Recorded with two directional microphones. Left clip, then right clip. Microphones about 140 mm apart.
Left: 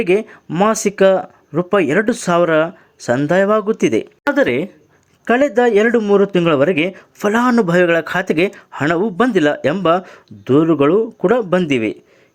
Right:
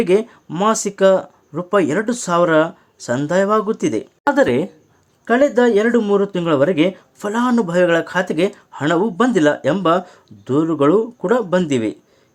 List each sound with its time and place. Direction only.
0.0 s speech: 25° left (ahead or behind)
4.2 s speech: 15° left (ahead or behind)
5.2 s speech: 35° left (ahead or behind)